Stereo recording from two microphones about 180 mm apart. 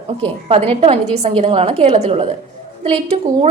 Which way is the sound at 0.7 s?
35° right (ahead or behind).